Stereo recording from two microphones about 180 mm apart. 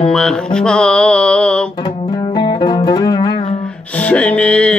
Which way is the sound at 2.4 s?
25° left (ahead or behind).